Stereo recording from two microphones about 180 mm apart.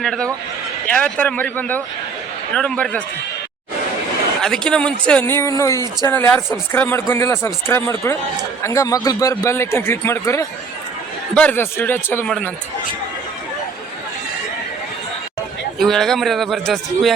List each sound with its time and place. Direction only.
0.0 s a man's voice: centre (ahead or behind)
4.4 s speech: 5° left (ahead or behind)
15.8 s a man's voice: centre (ahead or behind)